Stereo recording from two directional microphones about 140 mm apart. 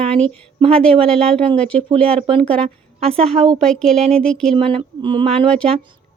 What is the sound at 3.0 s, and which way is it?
Speech, 45° right (ahead or behind).